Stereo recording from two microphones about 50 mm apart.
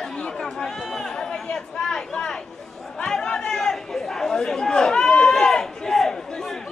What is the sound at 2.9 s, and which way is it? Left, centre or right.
Chatter, centre.